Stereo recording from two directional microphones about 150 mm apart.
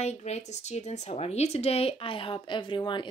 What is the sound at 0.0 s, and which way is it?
A woman's voice, 50° left (ahead or behind).